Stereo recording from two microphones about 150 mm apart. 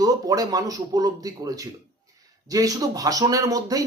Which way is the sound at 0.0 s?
25° right (ahead or behind).